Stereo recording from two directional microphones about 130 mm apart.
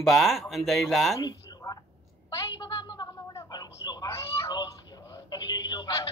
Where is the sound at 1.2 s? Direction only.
30° left (ahead or behind).